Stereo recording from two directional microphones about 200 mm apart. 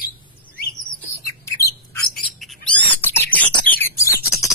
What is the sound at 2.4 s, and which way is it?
Rodents, 5° left (ahead or behind).